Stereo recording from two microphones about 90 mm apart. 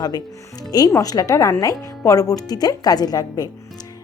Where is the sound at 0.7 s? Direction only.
40° left (ahead or behind).